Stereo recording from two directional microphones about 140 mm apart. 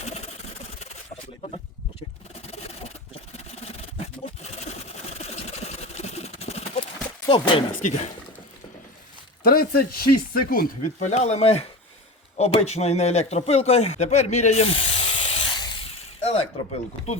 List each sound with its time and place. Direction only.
2.5 s a sound: 45° left (ahead or behind)
3.3 s sewing machine: 50° left (ahead or behind)
7.3 s speech: 35° left (ahead or behind)
7.7 s speech: 70° left (ahead or behind)
9.4 s speech: 90° left
11.0 s speech: 55° left (ahead or behind); by 15.8 s 35° left (ahead or behind)
16.0 s speech: 45° left (ahead or behind)